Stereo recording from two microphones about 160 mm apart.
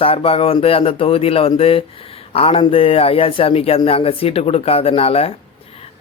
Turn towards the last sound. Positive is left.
turn(degrees=35)  # may be behind; listen again after turning